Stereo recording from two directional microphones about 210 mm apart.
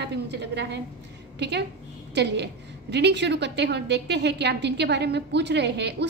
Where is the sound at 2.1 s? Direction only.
55° right (ahead or behind).